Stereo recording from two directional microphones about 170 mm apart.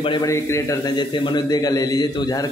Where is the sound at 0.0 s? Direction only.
30° left (ahead or behind).